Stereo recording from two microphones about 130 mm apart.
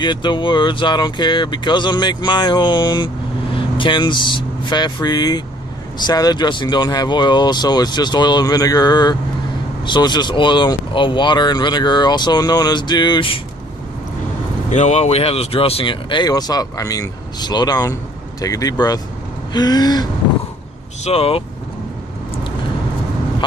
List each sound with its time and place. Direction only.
0.0 s speech: 35° left (ahead or behind)
14.7 s speech: 65° left (ahead or behind); by 20.1 s 30° left (ahead or behind)
21.0 s speech: 50° left (ahead or behind)